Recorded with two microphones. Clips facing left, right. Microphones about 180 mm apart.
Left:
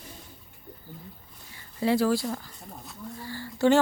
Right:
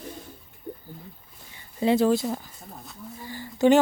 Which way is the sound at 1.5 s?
20° right (ahead or behind).